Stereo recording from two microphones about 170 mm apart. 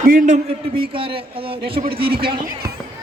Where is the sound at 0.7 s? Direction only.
30° right (ahead or behind).